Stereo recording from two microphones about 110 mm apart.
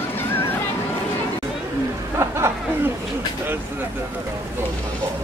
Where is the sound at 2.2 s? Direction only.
25° right (ahead or behind).